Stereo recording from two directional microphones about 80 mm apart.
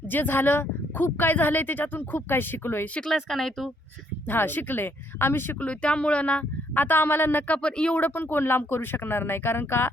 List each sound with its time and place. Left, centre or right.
0.1 s speech: left
2.9 s speech: centre
4.3 s speech: left
5.5 s speech: centre
8.0 s speech: left